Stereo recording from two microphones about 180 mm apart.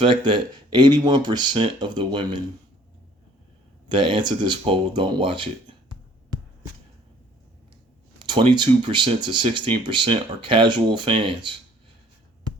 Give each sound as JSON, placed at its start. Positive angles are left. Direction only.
{"t": 0.0, "sound": "speech", "side_deg": -25}
{"t": 3.9, "sound": "speech", "side_deg": -25}
{"t": 8.2, "sound": "speech", "side_deg": -25}